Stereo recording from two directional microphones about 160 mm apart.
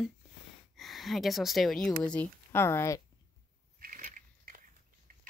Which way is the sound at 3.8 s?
60° right (ahead or behind).